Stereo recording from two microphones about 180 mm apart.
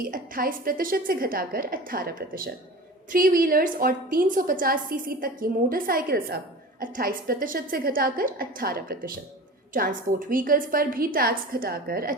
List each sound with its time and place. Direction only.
0.0 s a woman's voice: 50° right (ahead or behind)